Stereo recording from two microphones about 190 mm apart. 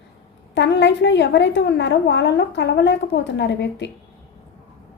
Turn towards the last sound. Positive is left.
turn(degrees=65)  # may be behind; listen again after turning